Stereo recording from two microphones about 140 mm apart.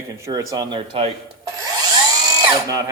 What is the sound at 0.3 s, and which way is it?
Speech, 25° right (ahead or behind).